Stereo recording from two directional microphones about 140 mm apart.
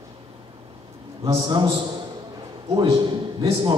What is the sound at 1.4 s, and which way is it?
Speech, 35° right (ahead or behind).